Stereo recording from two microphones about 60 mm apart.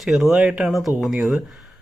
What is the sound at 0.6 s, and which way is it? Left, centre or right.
Speech, centre.